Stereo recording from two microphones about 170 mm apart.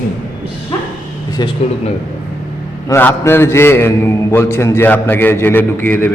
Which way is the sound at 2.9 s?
15° left (ahead or behind).